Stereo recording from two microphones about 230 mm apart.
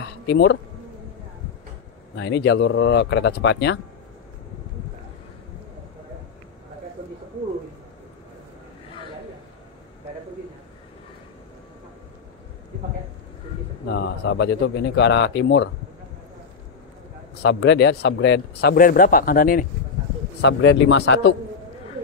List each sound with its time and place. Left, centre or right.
0.3 s speech: left
2.1 s speech: left
13.8 s speech: left
17.4 s speech: left
20.3 s speech: left